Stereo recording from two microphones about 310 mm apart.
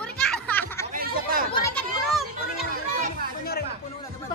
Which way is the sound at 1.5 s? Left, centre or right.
Centre.